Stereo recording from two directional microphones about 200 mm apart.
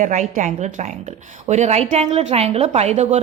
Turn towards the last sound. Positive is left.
turn(degrees=-35)  # may be behind; listen again after turning